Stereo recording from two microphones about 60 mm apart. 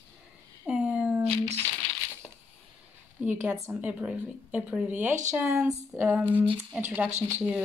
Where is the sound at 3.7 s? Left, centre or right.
Right.